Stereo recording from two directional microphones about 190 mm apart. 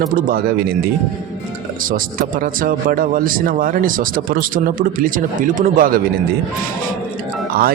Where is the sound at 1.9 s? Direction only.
45° right (ahead or behind).